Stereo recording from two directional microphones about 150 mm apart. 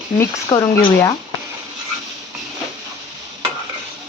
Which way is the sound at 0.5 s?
25° left (ahead or behind).